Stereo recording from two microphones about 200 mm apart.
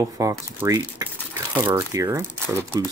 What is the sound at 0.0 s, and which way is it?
Speech, 15° right (ahead or behind).